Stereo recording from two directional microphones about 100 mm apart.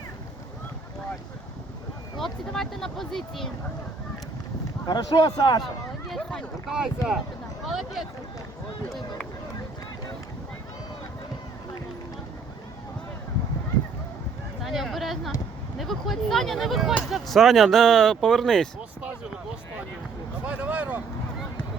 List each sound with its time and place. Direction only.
2.1 s speech: 5° left (ahead or behind)
4.9 s speech: 45° left (ahead or behind)
6.1 s speech: 5° left (ahead or behind)
6.7 s speech: 5° right (ahead or behind)
14.6 s speech: centre (ahead or behind)
20.4 s a sound: 15° right (ahead or behind)